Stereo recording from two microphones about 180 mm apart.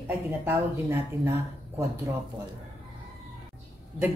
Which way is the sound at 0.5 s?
15° right (ahead or behind).